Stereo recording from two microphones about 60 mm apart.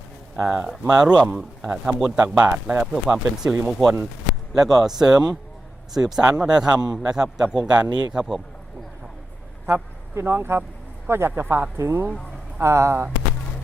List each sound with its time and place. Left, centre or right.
0.3 s speech: centre
2.8 s speech: centre
9.6 s speech: right